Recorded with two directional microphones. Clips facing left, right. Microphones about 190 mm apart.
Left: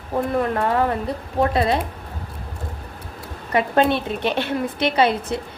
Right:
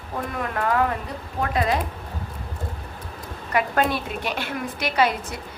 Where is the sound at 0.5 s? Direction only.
30° left (ahead or behind).